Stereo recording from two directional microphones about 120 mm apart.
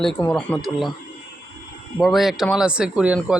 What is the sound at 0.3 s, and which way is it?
Speech, 10° left (ahead or behind).